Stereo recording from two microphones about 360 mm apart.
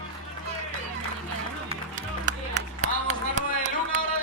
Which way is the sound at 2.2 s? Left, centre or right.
Centre.